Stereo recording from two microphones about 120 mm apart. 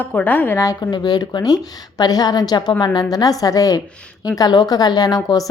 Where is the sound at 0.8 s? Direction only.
40° left (ahead or behind).